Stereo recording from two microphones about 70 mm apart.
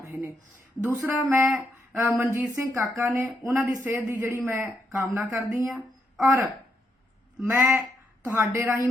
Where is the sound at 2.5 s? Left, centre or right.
Right.